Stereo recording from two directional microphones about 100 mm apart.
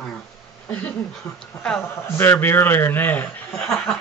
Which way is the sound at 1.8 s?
25° left (ahead or behind).